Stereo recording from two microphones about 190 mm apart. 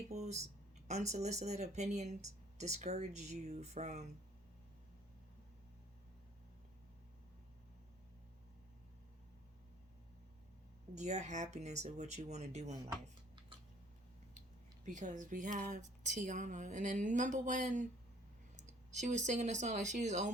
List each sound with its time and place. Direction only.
0.1 s speech: 35° right (ahead or behind)
10.9 s speech: 35° right (ahead or behind)
14.8 s speech: 40° right (ahead or behind)